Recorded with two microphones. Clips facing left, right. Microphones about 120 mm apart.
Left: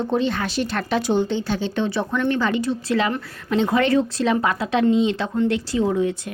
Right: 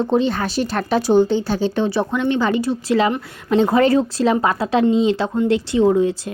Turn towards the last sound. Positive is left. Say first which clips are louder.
# right 5 dB
turn(degrees=-30)  # may be behind; listen again after turning